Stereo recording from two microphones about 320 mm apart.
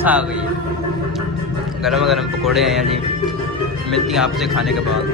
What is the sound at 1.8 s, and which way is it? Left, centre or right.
A man's voice, centre.